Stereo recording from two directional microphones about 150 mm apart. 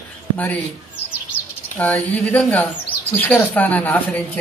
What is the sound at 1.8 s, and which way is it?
Speech, 10° left (ahead or behind).